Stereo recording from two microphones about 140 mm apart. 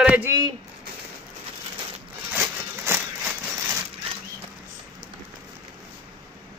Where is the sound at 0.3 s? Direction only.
25° right (ahead or behind).